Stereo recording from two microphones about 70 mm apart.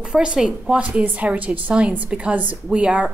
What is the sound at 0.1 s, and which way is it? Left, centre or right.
A woman's voice, centre.